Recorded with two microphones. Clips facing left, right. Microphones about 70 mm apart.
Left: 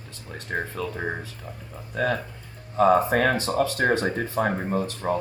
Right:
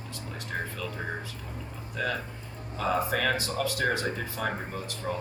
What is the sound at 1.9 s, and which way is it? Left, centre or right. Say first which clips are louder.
Speech: left 6 dB; left.